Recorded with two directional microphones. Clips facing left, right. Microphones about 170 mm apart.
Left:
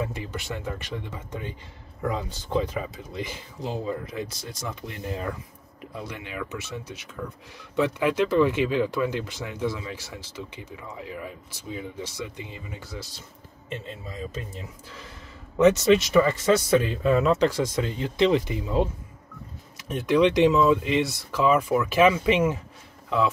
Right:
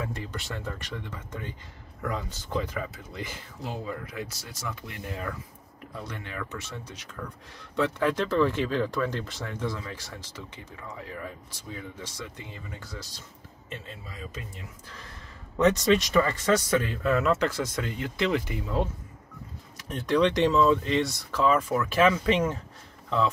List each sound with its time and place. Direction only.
0.0 s speech: 15° left (ahead or behind)
2.0 s speech: 25° left (ahead or behind)
16.1 s speech: 10° left (ahead or behind)
19.9 s speech: 15° left (ahead or behind)